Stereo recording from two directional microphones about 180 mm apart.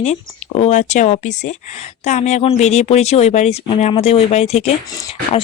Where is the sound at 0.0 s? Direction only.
40° left (ahead or behind).